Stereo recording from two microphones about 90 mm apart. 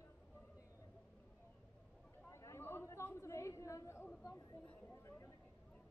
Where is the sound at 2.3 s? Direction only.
30° left (ahead or behind).